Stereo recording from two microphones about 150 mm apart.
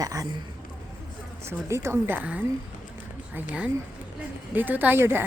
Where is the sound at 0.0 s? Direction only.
20° right (ahead or behind).